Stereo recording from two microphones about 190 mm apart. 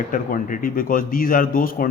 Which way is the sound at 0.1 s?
45° left (ahead or behind).